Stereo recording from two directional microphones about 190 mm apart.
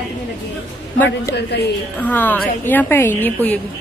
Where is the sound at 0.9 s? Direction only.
10° left (ahead or behind).